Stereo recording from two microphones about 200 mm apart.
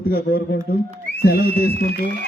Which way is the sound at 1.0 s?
55° left (ahead or behind).